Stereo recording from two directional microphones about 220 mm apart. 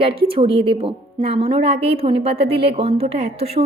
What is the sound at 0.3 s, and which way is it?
A woman's voice, 25° right (ahead or behind).